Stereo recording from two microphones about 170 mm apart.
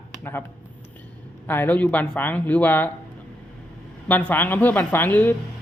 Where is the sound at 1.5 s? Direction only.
10° left (ahead or behind).